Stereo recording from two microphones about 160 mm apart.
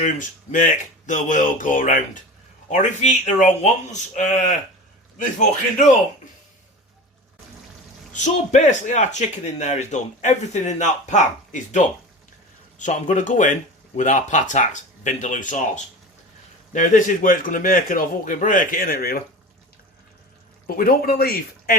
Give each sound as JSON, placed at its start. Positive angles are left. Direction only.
{"t": 0.0, "sound": "a man's voice", "side_deg": 55}
{"t": 8.1, "sound": "a man's voice", "side_deg": 50}
{"t": 12.8, "sound": "a man's voice", "side_deg": 50}
{"t": 20.7, "sound": "a man's voice", "side_deg": 65}